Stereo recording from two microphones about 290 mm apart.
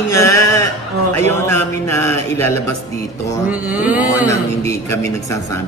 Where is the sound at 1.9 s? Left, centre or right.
Centre.